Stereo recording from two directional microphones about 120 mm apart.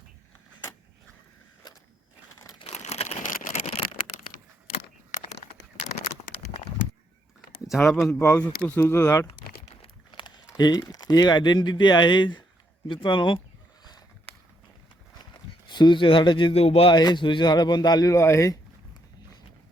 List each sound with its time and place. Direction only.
2.6 s crumpling: 70° left (ahead or behind)
7.7 s speech: centre (ahead or behind)
8.2 s a man's voice: 15° left (ahead or behind)
9.2 s crumpling: 55° left (ahead or behind)
10.1 s a sound: 40° left (ahead or behind)
10.6 s speech: 35° left (ahead or behind)
15.2 s a sound: 40° left (ahead or behind)
16.6 s speech: 55° left (ahead or behind)
16.9 s speech: 35° left (ahead or behind)